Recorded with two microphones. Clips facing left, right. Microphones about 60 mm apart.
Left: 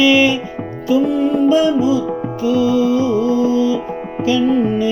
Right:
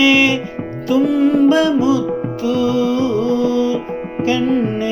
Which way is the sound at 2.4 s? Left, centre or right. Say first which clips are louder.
Left 2 dB; right.